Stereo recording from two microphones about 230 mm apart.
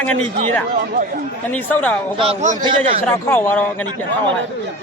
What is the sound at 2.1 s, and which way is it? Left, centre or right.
Speech, right.